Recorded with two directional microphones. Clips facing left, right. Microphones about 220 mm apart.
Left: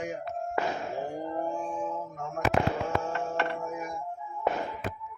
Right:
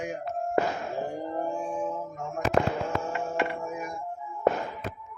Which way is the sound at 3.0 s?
5° right (ahead or behind).